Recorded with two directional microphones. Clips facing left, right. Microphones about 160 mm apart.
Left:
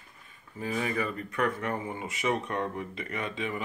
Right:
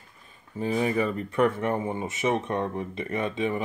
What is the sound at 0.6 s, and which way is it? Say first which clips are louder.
Speech: right 6 dB; 25° right (ahead or behind).